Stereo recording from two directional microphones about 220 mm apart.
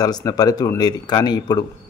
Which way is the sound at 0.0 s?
15° left (ahead or behind).